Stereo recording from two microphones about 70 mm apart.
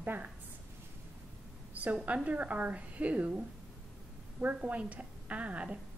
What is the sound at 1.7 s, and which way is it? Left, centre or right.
A woman's voice, right.